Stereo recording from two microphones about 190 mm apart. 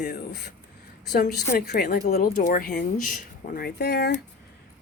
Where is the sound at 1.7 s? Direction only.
55° left (ahead or behind).